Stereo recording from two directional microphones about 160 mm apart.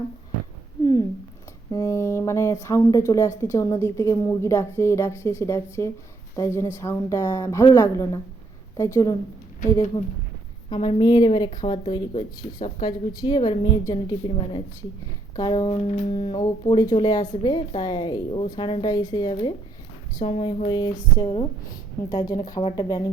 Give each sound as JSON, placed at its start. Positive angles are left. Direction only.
{"t": 1.7, "sound": "speech", "side_deg": 20}
{"t": 10.7, "sound": "a woman's voice", "side_deg": 35}